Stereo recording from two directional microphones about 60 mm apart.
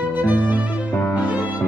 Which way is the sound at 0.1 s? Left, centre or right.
Right.